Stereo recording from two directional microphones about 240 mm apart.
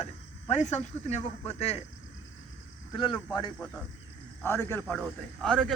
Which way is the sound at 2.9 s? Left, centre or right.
Centre.